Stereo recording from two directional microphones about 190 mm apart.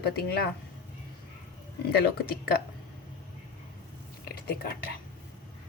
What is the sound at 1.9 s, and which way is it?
Speech, 55° left (ahead or behind).